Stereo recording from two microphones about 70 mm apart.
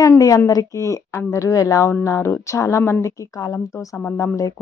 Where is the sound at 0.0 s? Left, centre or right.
Left.